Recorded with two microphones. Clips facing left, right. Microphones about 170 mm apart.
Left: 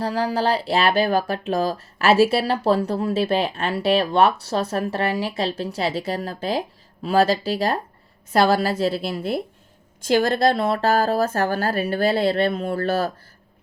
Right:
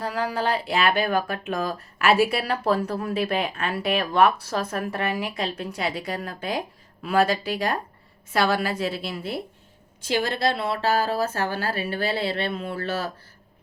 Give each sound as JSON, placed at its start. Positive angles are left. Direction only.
{"t": 0.0, "sound": "a woman's voice", "side_deg": 30}